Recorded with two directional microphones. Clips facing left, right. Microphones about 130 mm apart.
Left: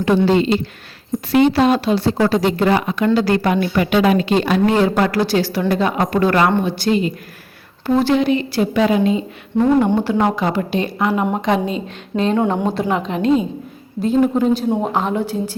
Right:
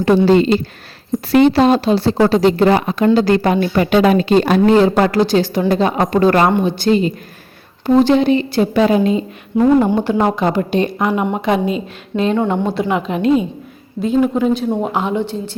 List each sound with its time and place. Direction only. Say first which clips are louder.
0.3 s speech: right 3 dB; 40° right (ahead or behind)
5.2 s a woman's voice: right 3 dB; 20° right (ahead or behind)
8.1 s speech: right 3 dB; 30° right (ahead or behind)
9.6 s speech: right 2 dB; 5° right (ahead or behind)
11.7 s a woman's voice: right 2 dB; 30° left (ahead or behind)
12.4 s a woman's voice: right 1 dB; centre (ahead or behind)